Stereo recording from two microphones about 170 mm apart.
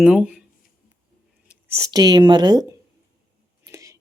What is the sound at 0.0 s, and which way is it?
Speech, 5° right (ahead or behind).